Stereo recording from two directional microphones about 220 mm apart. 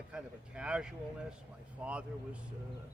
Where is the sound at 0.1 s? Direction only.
5° right (ahead or behind).